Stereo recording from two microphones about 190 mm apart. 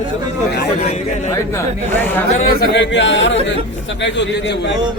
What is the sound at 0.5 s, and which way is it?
Speech, 55° left (ahead or behind).